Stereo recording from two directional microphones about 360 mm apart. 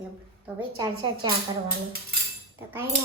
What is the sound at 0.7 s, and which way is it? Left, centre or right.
Speech, centre.